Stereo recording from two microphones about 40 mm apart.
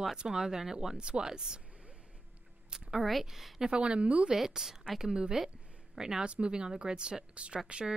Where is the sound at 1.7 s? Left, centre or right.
Right.